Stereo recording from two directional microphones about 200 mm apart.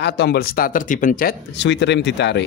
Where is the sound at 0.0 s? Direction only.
55° left (ahead or behind).